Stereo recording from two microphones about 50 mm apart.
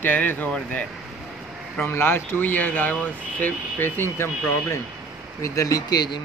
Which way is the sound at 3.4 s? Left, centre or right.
Left.